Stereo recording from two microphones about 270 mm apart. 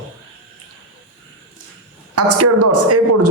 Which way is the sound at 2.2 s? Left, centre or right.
Right.